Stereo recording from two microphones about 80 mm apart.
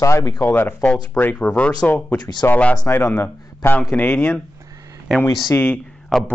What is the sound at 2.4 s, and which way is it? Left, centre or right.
A man's voice, centre.